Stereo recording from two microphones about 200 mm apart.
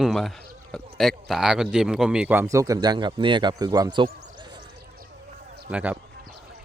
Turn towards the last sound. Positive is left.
turn(degrees=-5)  # may be behind; listen again after turning